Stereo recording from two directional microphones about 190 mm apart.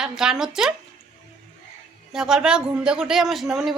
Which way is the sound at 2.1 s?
5° right (ahead or behind).